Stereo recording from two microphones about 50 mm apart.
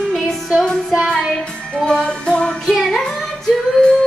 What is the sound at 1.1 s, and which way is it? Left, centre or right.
Music, centre.